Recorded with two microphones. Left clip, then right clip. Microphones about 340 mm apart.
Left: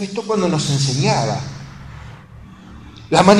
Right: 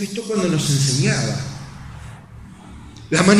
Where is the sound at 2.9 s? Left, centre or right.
Centre.